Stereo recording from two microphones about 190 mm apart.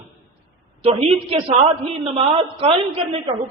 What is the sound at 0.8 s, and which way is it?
A man's voice, 30° right (ahead or behind).